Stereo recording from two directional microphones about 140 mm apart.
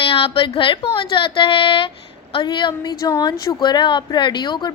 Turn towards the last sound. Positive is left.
turn(degrees=35)  # may be behind; listen again after turning